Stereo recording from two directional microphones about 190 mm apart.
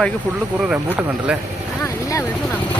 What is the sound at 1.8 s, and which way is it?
Vehicle, 15° left (ahead or behind).